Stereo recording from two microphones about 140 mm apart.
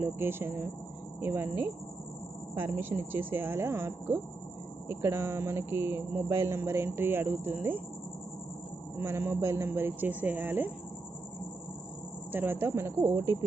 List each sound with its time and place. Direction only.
0.0 s speech: 15° right (ahead or behind)
8.9 s speech: 15° right (ahead or behind)
12.3 s speech: 15° right (ahead or behind)